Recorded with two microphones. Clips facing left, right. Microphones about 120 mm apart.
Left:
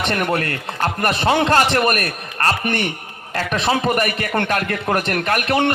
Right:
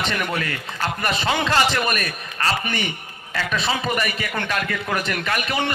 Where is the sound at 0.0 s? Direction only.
55° left (ahead or behind).